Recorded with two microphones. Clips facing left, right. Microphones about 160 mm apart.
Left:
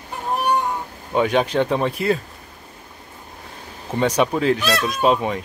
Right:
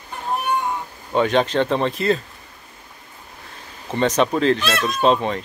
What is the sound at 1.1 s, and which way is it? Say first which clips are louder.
Speech: even; 10° left (ahead or behind).